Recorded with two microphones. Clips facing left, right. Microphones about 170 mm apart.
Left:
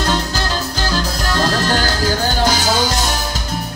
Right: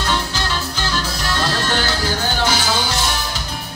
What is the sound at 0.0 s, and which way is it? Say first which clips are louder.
Music: left 3 dB; 40° left (ahead or behind).